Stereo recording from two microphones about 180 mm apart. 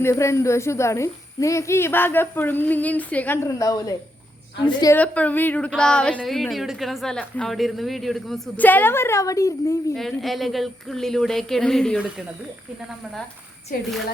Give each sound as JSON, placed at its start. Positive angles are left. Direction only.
{"t": 0.0, "sound": "a woman's voice", "side_deg": 15}
{"t": 4.9, "sound": "a woman's voice", "side_deg": 10}
{"t": 9.9, "sound": "a woman's voice", "side_deg": 0}
{"t": 13.7, "sound": "a woman's voice", "side_deg": 50}